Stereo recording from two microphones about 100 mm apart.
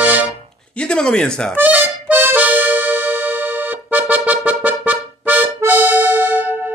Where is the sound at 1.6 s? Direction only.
15° right (ahead or behind).